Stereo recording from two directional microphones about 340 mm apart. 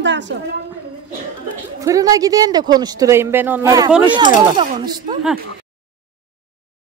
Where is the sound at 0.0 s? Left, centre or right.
Right.